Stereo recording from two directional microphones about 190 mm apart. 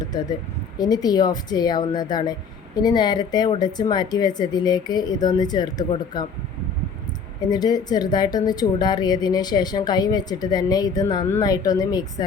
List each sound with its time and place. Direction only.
0.0 s speech: 20° left (ahead or behind)
7.5 s speech: 20° left (ahead or behind)